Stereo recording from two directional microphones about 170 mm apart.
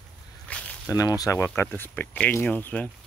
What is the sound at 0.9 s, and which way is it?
Speech, 20° left (ahead or behind).